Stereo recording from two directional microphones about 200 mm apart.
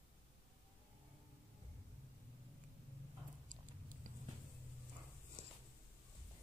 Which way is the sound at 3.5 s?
40° right (ahead or behind).